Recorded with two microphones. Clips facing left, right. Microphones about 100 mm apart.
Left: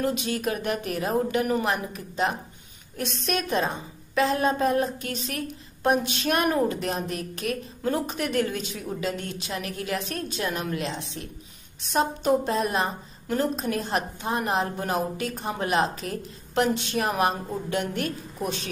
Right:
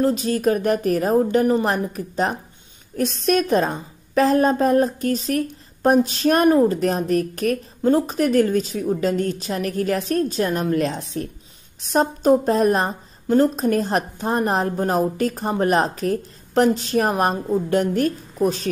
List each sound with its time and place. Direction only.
0.0 s a woman's voice: 35° right (ahead or behind)